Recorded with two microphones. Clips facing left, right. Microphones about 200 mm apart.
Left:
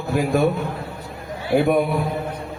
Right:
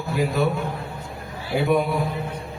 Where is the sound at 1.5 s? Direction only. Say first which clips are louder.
Left 6 dB; 50° left (ahead or behind).